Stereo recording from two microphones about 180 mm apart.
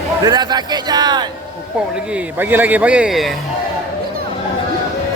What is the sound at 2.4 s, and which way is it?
Speech, 10° right (ahead or behind).